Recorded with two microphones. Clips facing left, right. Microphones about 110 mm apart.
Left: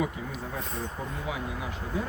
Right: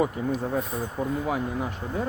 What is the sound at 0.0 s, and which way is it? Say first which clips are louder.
Speech: right 7 dB; 45° right (ahead or behind).